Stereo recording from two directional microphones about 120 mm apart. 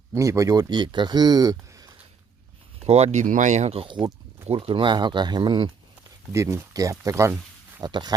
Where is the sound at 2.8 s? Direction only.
65° right (ahead or behind).